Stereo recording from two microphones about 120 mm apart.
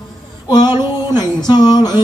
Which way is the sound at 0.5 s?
35° left (ahead or behind).